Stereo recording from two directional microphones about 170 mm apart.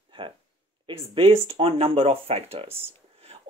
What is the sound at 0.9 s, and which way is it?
Speech, 30° right (ahead or behind).